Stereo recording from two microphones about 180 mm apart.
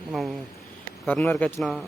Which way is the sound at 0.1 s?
Centre (ahead or behind).